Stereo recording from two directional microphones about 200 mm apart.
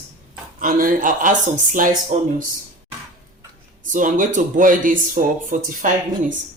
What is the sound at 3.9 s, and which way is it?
Speech, 40° right (ahead or behind).